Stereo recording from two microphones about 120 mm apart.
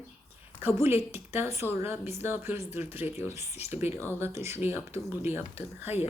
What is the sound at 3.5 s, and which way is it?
Speech, 65° left (ahead or behind).